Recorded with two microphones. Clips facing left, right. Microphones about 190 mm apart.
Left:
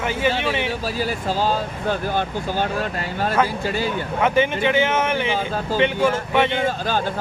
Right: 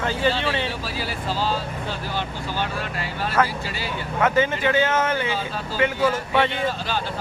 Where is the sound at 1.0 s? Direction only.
45° left (ahead or behind).